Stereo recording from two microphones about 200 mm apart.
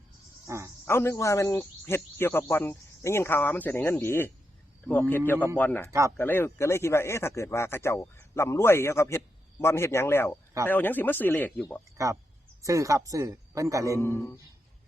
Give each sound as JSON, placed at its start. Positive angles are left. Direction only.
{"t": 0.4, "sound": "speech", "side_deg": -15}
{"t": 0.9, "sound": "speech", "side_deg": 15}
{"t": 5.9, "sound": "speech", "side_deg": -15}
{"t": 6.1, "sound": "speech", "side_deg": 10}
{"t": 12.0, "sound": "speech", "side_deg": -15}
{"t": 14.0, "sound": "speech", "side_deg": 10}